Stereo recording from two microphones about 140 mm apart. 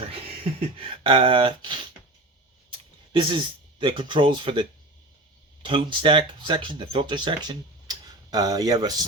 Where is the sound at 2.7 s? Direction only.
35° right (ahead or behind).